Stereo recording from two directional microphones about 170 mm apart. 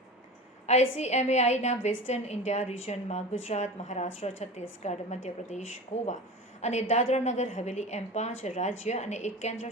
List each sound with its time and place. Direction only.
0.7 s a woman's voice: 40° left (ahead or behind)